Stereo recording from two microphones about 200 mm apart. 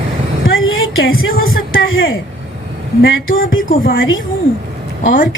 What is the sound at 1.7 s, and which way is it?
Speech, 75° left (ahead or behind).